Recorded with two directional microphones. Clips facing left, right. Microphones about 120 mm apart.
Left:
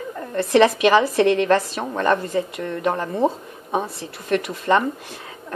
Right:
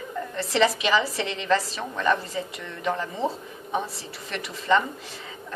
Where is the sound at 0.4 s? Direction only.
55° left (ahead or behind).